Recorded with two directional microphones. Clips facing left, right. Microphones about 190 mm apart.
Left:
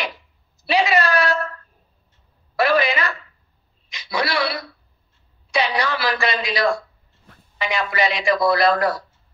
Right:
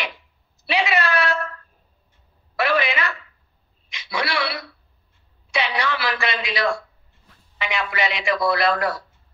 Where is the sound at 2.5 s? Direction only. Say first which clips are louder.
Left 3 dB; 40° left (ahead or behind).